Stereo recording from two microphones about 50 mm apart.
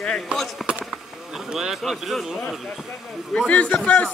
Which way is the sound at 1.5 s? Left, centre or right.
Centre.